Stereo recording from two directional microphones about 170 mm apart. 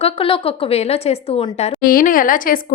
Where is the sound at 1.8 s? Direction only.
55° left (ahead or behind).